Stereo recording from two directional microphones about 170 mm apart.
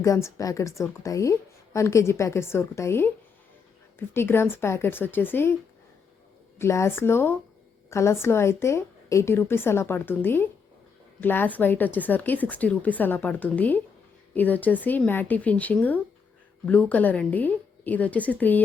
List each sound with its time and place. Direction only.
0.0 s a woman's voice: 20° left (ahead or behind)
6.6 s a woman's voice: 15° left (ahead or behind)